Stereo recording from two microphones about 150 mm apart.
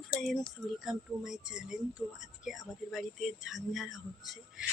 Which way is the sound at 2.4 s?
Centre (ahead or behind).